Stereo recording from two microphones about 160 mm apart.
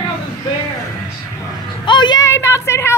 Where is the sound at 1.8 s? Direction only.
30° left (ahead or behind).